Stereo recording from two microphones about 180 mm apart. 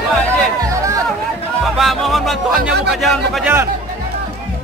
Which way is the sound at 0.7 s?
15° right (ahead or behind).